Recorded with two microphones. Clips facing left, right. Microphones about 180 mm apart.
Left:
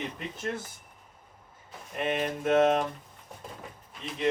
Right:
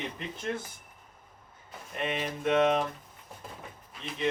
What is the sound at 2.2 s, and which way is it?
Speech, centre (ahead or behind).